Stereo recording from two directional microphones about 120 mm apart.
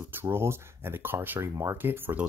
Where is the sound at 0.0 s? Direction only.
20° right (ahead or behind).